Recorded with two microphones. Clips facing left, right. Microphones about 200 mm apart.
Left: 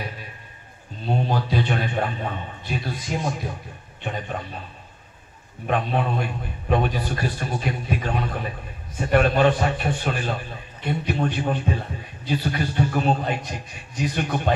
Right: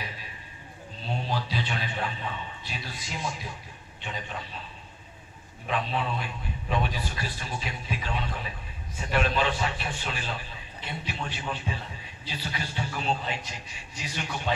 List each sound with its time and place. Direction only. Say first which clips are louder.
1.0 s a man's voice: left 7 dB; 50° left (ahead or behind)
5.7 s a man's voice: left 6 dB; 50° left (ahead or behind)